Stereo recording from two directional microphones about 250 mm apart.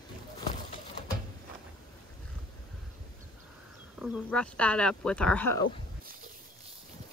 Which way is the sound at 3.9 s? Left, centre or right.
Centre.